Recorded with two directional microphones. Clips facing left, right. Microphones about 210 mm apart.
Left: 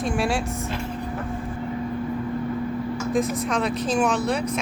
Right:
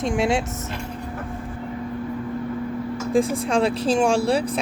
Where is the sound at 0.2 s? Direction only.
20° right (ahead or behind).